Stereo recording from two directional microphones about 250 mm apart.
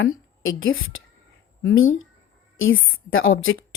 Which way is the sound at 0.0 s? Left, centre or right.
Left.